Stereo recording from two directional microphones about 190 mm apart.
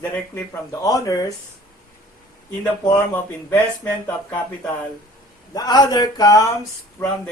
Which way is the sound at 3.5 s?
10° left (ahead or behind).